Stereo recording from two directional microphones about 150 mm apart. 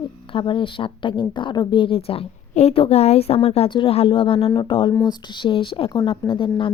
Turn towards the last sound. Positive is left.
turn(degrees=35)  # may be behind; listen again after turning